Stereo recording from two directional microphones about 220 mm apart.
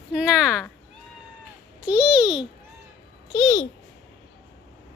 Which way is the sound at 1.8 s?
5° right (ahead or behind).